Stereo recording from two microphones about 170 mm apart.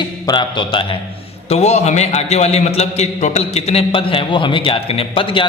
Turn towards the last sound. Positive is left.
turn(degrees=30)  # may be behind; listen again after turning